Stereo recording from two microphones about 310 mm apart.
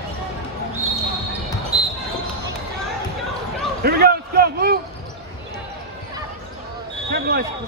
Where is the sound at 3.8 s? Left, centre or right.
Right.